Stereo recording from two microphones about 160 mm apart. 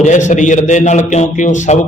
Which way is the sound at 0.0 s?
50° left (ahead or behind).